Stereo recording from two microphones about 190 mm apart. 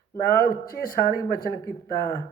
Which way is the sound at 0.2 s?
50° left (ahead or behind).